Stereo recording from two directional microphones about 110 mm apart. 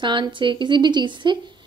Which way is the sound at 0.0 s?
45° right (ahead or behind).